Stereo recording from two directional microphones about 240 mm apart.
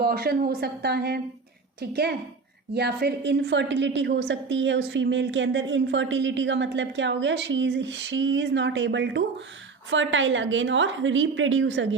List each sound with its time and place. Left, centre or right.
0.0 s a woman's voice: right